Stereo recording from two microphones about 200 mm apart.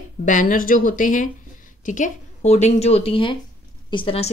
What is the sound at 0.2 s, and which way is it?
Speech, 40° left (ahead or behind).